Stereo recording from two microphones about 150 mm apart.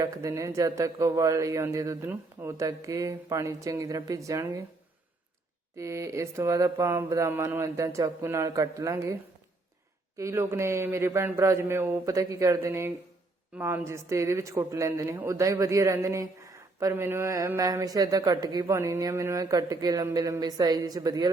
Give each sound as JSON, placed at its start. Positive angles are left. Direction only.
{"t": 0.0, "sound": "speech", "side_deg": -20}
{"t": 5.7, "sound": "speech", "side_deg": -20}
{"t": 10.2, "sound": "a man's voice", "side_deg": -20}